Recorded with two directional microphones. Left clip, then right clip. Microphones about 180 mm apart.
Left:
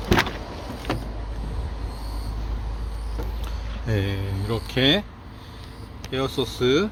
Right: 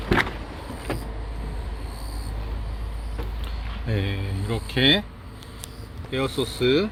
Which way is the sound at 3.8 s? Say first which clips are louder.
Left 2 dB; 5° left (ahead or behind).